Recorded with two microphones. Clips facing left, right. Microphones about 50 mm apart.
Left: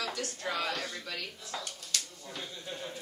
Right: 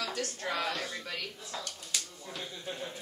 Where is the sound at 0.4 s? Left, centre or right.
Right.